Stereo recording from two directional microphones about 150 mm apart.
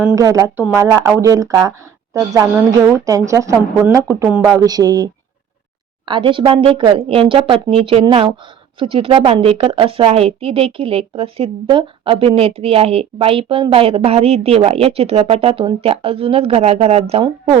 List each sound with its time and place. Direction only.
0.2 s a woman's voice: 20° right (ahead or behind)
3.8 s speech: 10° right (ahead or behind)
4.5 s a woman's voice: 25° right (ahead or behind)
6.1 s a woman's voice: 35° right (ahead or behind)